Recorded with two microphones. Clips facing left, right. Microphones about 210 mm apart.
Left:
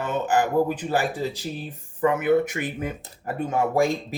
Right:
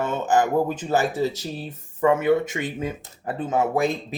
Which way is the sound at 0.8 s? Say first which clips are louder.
Right 3 dB; 20° right (ahead or behind).